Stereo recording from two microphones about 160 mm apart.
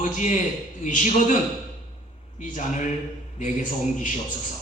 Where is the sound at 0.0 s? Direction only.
50° left (ahead or behind).